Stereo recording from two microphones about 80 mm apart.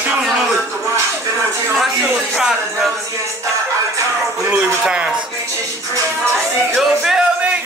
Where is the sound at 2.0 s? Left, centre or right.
Centre.